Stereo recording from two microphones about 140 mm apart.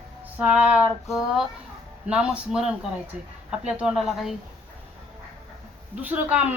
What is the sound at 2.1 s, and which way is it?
Speech, 5° right (ahead or behind).